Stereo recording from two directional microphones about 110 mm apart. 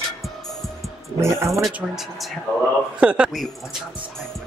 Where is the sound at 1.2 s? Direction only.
25° right (ahead or behind).